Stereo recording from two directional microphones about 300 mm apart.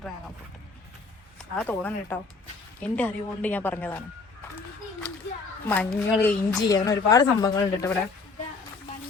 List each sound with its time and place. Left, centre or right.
1.5 s a woman's voice: centre
5.6 s a woman's voice: centre